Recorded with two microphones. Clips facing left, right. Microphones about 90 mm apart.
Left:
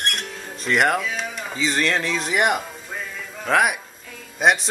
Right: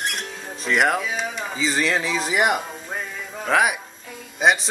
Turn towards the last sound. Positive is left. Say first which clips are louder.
# even
turn(degrees=0)  # may be behind; listen again after turning